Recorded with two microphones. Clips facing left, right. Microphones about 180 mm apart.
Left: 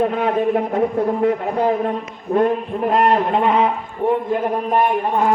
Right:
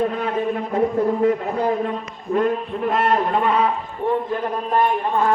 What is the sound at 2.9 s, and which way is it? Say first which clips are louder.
A man's voice: left 3 dB; 25° left (ahead or behind).